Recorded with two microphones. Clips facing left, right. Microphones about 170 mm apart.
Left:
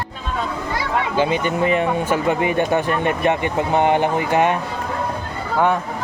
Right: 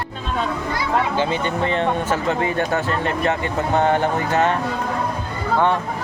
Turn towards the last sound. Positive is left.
turn(degrees=10)  # may be behind; listen again after turning